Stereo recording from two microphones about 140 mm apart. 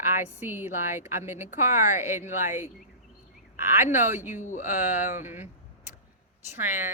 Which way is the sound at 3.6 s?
15° right (ahead or behind).